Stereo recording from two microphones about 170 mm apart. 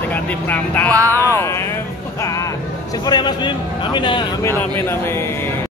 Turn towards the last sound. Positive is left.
turn(degrees=15)  # may be behind; listen again after turning